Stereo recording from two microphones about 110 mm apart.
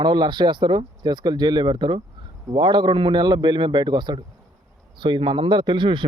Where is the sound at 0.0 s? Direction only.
40° right (ahead or behind).